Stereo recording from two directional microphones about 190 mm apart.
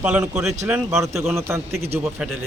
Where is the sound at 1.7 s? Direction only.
35° right (ahead or behind).